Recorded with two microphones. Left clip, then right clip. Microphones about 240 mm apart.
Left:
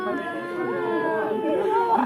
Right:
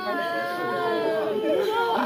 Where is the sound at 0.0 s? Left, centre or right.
Centre.